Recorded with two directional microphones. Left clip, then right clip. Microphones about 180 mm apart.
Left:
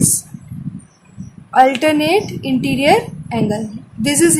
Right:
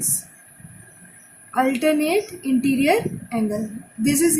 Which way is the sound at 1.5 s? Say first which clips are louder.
Left 8 dB; 40° left (ahead or behind).